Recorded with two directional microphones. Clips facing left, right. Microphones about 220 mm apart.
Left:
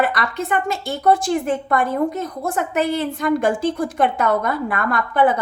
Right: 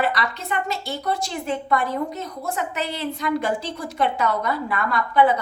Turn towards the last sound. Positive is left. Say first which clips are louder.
# left 2 dB
turn(degrees=50)  # may be behind; listen again after turning